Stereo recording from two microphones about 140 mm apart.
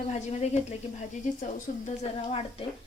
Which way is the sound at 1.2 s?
65° left (ahead or behind).